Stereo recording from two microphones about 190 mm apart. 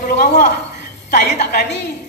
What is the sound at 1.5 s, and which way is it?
Speech, 65° left (ahead or behind).